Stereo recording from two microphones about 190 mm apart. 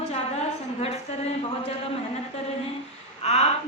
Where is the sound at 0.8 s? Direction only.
35° left (ahead or behind).